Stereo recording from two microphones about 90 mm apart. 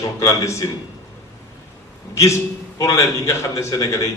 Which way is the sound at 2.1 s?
35° left (ahead or behind).